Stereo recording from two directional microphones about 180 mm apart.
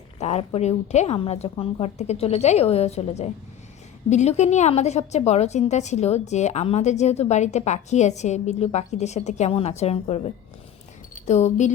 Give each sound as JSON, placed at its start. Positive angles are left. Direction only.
{"t": 0.2, "sound": "a woman's voice", "side_deg": 35}